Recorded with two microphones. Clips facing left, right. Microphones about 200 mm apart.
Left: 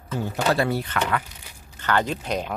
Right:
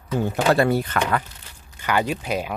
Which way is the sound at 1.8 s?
10° right (ahead or behind).